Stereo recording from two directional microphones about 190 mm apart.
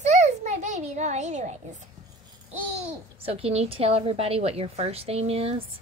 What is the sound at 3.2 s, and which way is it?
A child's voice, 30° right (ahead or behind).